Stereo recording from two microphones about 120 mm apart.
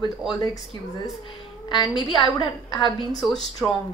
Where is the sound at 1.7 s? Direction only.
35° left (ahead or behind).